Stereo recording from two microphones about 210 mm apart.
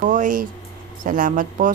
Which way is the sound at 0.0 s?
40° right (ahead or behind).